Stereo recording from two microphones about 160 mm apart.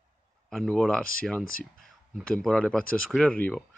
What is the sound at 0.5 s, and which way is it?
Speech, centre (ahead or behind).